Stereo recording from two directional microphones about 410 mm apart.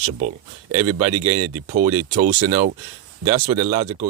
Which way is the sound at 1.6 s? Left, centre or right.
Centre.